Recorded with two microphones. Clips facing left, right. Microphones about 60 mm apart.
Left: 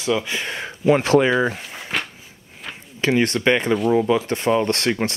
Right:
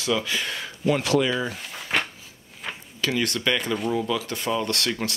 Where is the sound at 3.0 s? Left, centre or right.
Left.